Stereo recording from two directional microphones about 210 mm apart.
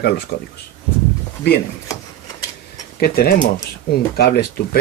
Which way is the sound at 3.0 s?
50° left (ahead or behind).